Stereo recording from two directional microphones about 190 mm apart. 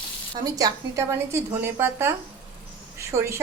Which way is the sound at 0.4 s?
20° right (ahead or behind).